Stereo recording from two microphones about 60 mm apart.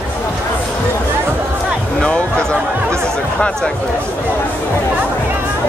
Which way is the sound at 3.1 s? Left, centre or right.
Centre.